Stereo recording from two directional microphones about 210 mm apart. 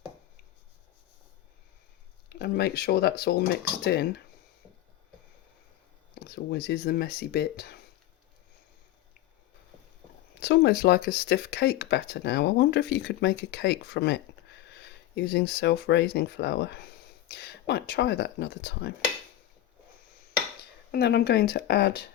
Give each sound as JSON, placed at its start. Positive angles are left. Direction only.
{"t": 2.4, "sound": "speech", "side_deg": 50}
{"t": 6.1, "sound": "speech", "side_deg": 55}
{"t": 10.4, "sound": "speech", "side_deg": 50}
{"t": 20.9, "sound": "speech", "side_deg": 50}